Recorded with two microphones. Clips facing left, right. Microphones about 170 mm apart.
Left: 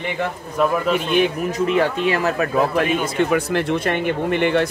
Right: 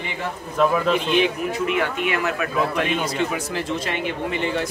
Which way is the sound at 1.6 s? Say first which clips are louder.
Left 6 dB; 35° left (ahead or behind).